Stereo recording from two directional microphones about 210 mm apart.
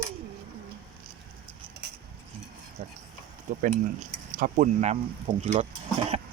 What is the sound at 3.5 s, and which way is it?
Speech, 40° right (ahead or behind).